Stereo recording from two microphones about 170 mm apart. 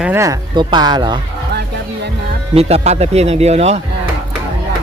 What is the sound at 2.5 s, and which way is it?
Speech, 40° right (ahead or behind).